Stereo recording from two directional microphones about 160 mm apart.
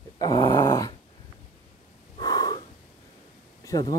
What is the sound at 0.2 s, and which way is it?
Dog, 25° left (ahead or behind).